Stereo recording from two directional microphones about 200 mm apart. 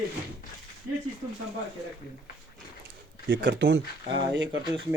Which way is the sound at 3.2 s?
65° right (ahead or behind).